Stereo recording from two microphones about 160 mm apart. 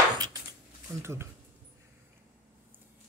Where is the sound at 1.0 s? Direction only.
15° right (ahead or behind).